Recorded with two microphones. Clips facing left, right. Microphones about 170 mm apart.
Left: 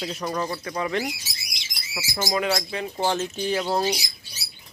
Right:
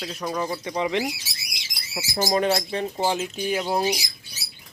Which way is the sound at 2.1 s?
35° right (ahead or behind).